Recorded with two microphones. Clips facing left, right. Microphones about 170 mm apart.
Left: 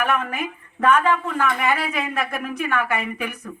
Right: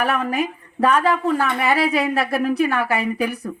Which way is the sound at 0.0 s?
35° right (ahead or behind).